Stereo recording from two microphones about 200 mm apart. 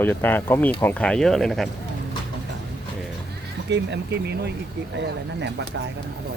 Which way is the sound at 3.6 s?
60° right (ahead or behind).